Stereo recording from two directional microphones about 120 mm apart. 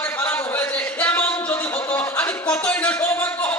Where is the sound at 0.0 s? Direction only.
15° left (ahead or behind).